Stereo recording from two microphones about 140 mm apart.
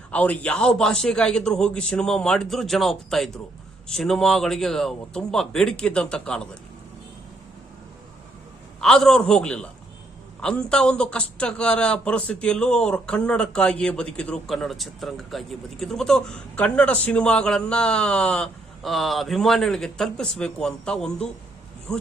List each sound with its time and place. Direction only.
0.1 s a man's voice: 10° left (ahead or behind)
8.8 s a man's voice: 5° left (ahead or behind)